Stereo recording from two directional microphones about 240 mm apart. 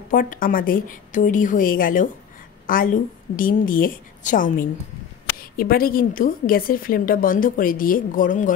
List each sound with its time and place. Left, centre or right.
0.1 s a woman's voice: left